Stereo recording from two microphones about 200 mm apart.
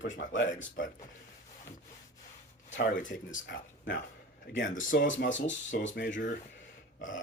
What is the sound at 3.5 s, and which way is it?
Speech, 60° left (ahead or behind).